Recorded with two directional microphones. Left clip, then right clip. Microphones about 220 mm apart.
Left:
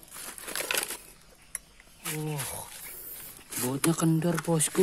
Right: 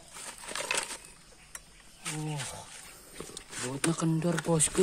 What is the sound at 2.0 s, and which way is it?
Wild animals, 30° left (ahead or behind).